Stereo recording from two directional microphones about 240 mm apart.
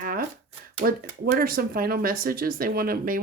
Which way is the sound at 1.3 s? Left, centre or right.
Right.